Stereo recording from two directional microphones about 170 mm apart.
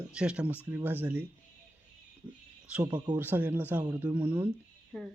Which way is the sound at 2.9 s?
25° right (ahead or behind).